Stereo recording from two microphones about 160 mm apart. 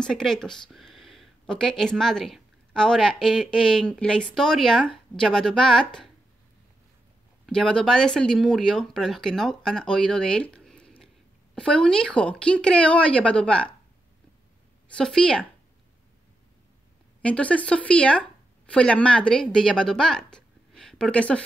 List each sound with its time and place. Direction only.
0.0 s speech: 5° left (ahead or behind)
7.4 s speech: 5° left (ahead or behind)
14.9 s speech: 5° left (ahead or behind)
17.2 s speech: 10° left (ahead or behind)